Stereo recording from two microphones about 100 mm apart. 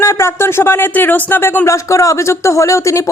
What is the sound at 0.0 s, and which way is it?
A woman's voice, 30° left (ahead or behind).